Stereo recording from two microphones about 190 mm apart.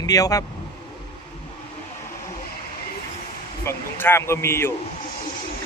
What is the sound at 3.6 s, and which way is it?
Speech, 10° left (ahead or behind).